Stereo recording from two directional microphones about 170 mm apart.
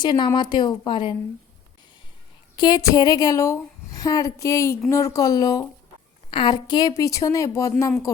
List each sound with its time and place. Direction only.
0.0 s speech: 25° left (ahead or behind)
2.6 s speech: 25° left (ahead or behind)